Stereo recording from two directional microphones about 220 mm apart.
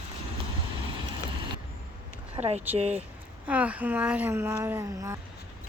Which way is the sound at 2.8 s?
30° right (ahead or behind).